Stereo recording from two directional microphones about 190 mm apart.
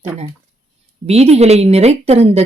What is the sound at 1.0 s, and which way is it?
Speech, 35° right (ahead or behind).